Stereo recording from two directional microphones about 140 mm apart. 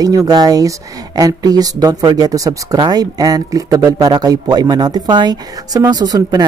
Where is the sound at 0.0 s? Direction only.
25° right (ahead or behind).